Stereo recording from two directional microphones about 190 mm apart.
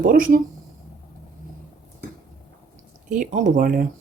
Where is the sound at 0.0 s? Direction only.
45° right (ahead or behind).